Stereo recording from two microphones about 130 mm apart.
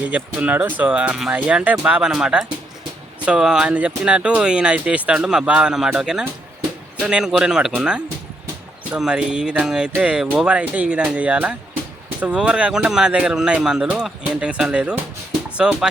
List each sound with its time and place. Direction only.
0.0 s speech: 10° right (ahead or behind)